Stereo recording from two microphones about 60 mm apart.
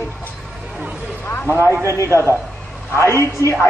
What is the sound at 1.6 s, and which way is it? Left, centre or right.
Speech, right.